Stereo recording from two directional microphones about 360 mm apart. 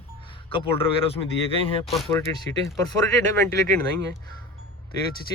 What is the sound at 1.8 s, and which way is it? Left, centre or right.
Speech, centre.